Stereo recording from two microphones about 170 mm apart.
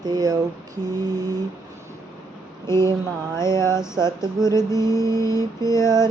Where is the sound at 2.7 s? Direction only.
15° left (ahead or behind).